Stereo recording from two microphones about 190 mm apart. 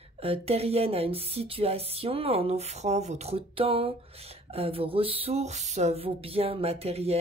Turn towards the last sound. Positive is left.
turn(degrees=-30)  # may be behind; listen again after turning